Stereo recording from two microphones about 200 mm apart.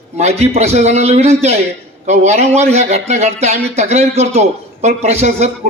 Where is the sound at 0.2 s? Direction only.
35° right (ahead or behind).